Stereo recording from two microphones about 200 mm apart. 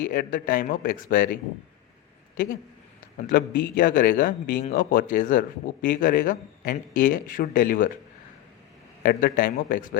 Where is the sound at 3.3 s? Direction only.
45° left (ahead or behind).